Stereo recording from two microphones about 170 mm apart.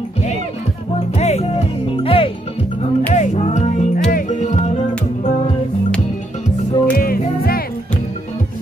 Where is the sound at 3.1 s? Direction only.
45° left (ahead or behind).